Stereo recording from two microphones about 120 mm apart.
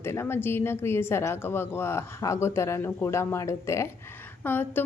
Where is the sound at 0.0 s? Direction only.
20° left (ahead or behind).